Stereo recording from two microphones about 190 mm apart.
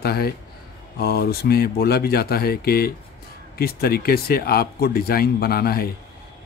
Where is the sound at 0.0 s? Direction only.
55° left (ahead or behind).